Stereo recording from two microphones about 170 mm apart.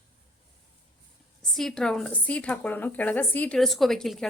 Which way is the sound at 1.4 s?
Centre (ahead or behind).